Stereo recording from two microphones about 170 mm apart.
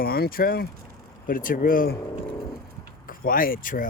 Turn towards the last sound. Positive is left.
turn(degrees=55)  # may be behind; listen again after turning